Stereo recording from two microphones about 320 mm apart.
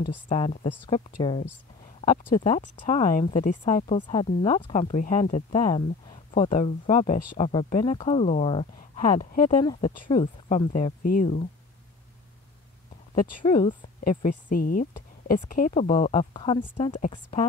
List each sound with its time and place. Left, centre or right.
0.3 s a woman's voice: centre
13.4 s speech: centre